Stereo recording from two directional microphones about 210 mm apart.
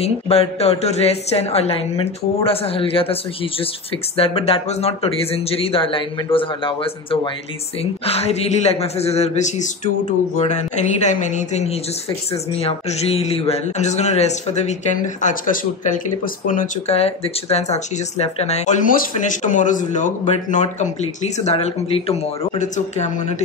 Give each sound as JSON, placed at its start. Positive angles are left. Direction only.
{"t": 0.0, "sound": "a woman's voice", "side_deg": 30}
{"t": 4.2, "sound": "a woman's voice", "side_deg": 25}